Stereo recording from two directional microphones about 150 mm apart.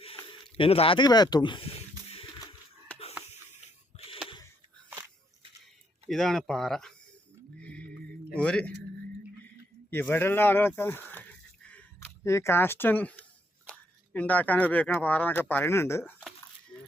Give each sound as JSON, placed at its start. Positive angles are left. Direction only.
{"t": 0.0, "sound": "a sound", "side_deg": 35}
{"t": 0.5, "sound": "speech", "side_deg": 40}
{"t": 3.9, "sound": "a sound", "side_deg": 40}
{"t": 6.1, "sound": "speech", "side_deg": 0}
{"t": 7.6, "sound": "music", "side_deg": 10}
{"t": 8.4, "sound": "speech", "side_deg": 10}
{"t": 9.9, "sound": "speech", "side_deg": 15}
{"t": 11.7, "sound": "a sound", "side_deg": 10}
{"t": 12.3, "sound": "speech", "side_deg": 20}